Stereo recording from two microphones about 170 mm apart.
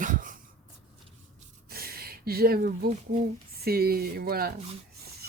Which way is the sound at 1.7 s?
65° right (ahead or behind).